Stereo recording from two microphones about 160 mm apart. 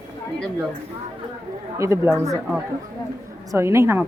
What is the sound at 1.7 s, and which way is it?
Speech, 20° right (ahead or behind).